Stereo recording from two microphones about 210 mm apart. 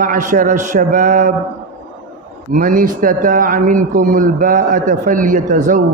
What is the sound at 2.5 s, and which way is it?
A man's voice, 40° right (ahead or behind).